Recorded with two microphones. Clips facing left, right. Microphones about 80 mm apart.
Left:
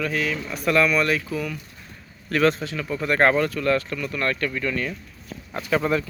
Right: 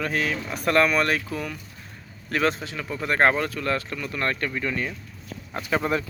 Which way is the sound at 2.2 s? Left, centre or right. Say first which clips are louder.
Left 4 dB; right.